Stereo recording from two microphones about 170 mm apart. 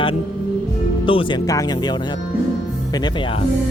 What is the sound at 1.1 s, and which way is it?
Speech, 30° left (ahead or behind).